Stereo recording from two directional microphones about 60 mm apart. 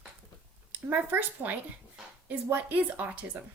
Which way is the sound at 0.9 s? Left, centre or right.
Right.